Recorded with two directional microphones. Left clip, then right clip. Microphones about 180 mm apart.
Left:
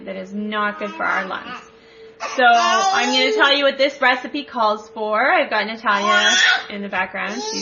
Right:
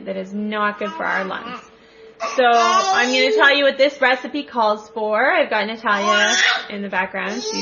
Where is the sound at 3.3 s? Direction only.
15° right (ahead or behind).